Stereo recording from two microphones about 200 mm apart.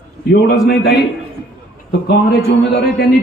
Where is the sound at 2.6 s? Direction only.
55° left (ahead or behind).